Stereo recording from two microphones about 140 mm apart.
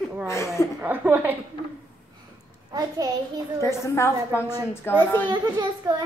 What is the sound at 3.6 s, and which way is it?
A child's voice, 20° left (ahead or behind).